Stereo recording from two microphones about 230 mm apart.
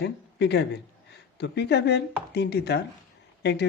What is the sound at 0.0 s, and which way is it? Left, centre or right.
A man's voice, left.